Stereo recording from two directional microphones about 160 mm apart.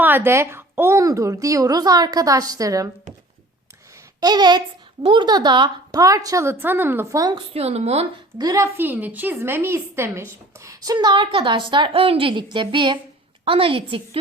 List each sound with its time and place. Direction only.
0.0 s a woman's voice: 15° right (ahead or behind)
4.2 s a woman's voice: 25° right (ahead or behind)
7.5 s a woman's voice: 40° right (ahead or behind)
8.4 s a woman's voice: 20° right (ahead or behind)